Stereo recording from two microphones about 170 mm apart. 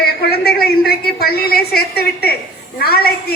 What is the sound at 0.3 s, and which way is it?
A woman's voice, 65° left (ahead or behind).